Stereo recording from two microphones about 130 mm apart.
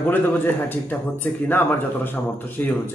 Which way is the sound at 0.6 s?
15° left (ahead or behind).